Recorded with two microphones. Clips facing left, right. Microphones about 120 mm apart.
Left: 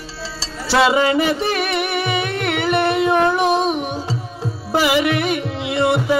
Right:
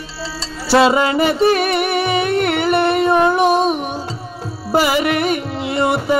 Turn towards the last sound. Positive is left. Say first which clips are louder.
# even
turn(degrees=-45)  # may be behind; listen again after turning